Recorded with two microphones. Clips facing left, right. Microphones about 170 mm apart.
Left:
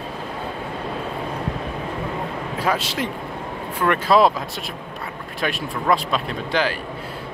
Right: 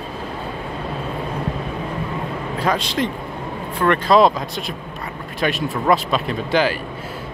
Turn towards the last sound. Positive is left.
turn(degrees=0)  # may be behind; listen again after turning